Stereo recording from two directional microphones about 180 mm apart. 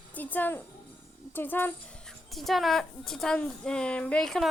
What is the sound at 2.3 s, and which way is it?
A woman's voice, centre (ahead or behind).